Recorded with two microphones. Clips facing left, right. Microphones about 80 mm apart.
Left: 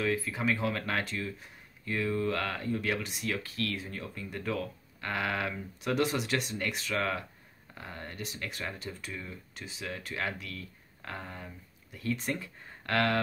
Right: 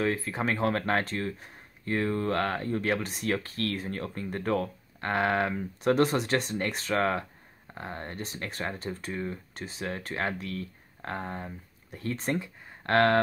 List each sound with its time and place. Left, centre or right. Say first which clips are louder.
0.0 s speech: right 2 dB; right